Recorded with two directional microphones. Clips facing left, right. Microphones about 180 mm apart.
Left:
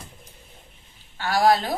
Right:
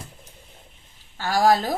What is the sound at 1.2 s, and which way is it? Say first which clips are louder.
Speech: even; 40° right (ahead or behind).